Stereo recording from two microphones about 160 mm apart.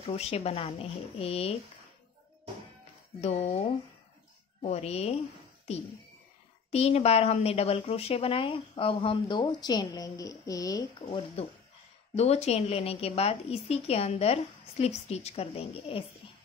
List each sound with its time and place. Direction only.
0.0 s a woman's voice: 40° left (ahead or behind)
3.2 s a woman's voice: 40° left (ahead or behind)
6.7 s a woman's voice: 40° left (ahead or behind); by 11.1 s 20° left (ahead or behind)
11.4 s a woman's voice: 35° left (ahead or behind)